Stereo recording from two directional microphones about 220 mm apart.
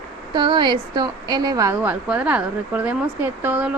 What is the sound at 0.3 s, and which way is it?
A woman's voice, 20° right (ahead or behind).